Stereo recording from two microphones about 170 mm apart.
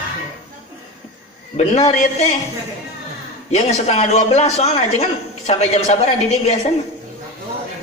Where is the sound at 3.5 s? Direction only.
40° left (ahead or behind).